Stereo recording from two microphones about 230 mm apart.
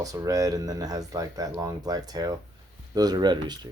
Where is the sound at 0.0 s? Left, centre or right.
Centre.